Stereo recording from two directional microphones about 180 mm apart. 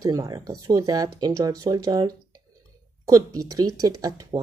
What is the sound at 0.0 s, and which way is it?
Speech, 20° right (ahead or behind).